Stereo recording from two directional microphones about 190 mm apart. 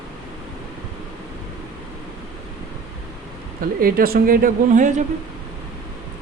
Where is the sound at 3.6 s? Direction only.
50° right (ahead or behind).